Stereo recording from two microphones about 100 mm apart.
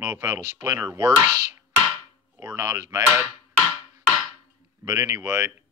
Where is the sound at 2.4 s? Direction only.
30° right (ahead or behind).